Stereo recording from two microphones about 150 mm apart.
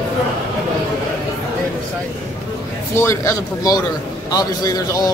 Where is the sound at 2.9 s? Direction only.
15° left (ahead or behind).